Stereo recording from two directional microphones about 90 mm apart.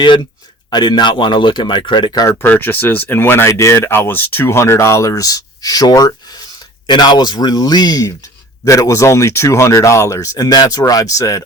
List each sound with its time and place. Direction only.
0.0 s speech: 60° left (ahead or behind)
2.4 s speech: 20° left (ahead or behind); by 11.4 s 40° left (ahead or behind)